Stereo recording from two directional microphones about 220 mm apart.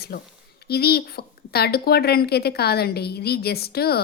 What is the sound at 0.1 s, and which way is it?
Speech, 45° left (ahead or behind).